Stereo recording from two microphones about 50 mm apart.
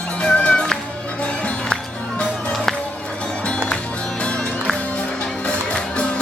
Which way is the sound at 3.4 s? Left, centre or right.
Centre.